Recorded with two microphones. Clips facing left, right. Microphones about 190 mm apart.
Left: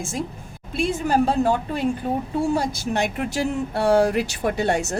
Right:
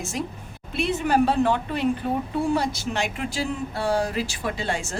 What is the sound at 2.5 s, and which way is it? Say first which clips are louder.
Speech: left 2 dB; 45° left (ahead or behind).